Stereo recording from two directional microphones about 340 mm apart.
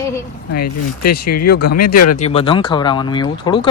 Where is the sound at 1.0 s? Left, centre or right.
Left.